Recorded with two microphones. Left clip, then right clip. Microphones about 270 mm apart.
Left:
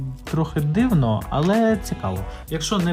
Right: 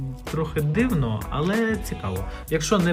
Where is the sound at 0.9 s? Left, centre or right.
Centre.